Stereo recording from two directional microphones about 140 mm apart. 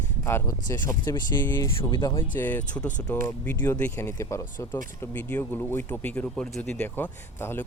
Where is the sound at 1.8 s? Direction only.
35° left (ahead or behind).